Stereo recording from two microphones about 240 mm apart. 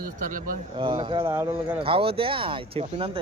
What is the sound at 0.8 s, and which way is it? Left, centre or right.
Speech, centre.